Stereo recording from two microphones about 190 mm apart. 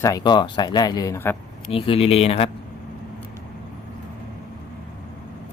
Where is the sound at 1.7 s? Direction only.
30° left (ahead or behind).